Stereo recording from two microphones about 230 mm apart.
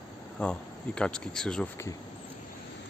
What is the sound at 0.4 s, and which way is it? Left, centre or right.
Speech, centre.